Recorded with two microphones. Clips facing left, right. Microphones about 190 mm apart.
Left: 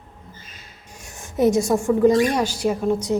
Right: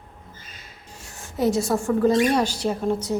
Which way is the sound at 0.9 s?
15° left (ahead or behind).